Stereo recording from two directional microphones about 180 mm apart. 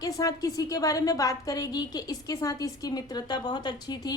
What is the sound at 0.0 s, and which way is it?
A woman's voice, 20° left (ahead or behind).